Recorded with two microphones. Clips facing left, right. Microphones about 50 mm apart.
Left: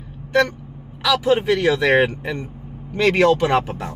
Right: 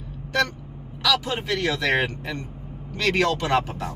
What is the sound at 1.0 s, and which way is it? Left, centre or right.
Speech, centre.